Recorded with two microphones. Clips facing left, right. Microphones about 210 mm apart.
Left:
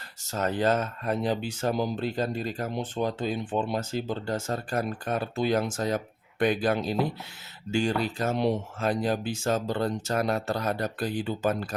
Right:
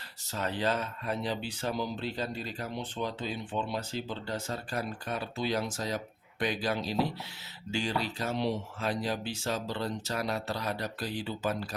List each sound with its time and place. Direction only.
0.3 s speech: 45° left (ahead or behind)